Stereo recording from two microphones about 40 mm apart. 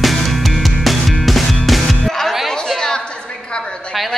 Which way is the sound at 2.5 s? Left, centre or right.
Centre.